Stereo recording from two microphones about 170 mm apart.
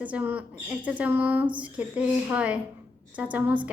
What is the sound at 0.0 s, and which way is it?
A woman's voice, 10° right (ahead or behind).